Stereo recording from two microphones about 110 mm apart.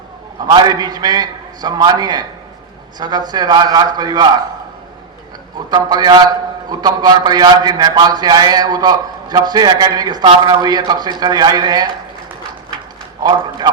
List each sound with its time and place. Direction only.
0.5 s a man's voice: 40° right (ahead or behind)
5.7 s a man's voice: 40° right (ahead or behind)